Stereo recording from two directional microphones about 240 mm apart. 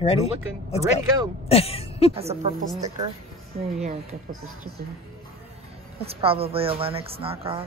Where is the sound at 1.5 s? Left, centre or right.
Left.